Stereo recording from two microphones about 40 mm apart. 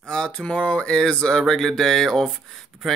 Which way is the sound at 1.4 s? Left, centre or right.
Centre.